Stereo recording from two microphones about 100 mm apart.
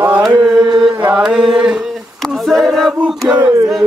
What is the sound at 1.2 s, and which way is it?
Speech, 5° right (ahead or behind).